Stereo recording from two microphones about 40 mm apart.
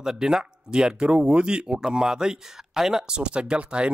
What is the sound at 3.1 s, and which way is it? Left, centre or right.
Speech, right.